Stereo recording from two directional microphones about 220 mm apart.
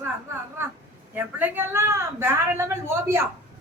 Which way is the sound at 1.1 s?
5° right (ahead or behind).